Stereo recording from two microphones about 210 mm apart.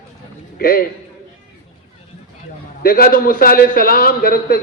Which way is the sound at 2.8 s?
45° left (ahead or behind).